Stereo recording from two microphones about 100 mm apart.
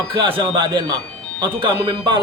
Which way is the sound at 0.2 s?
50° right (ahead or behind).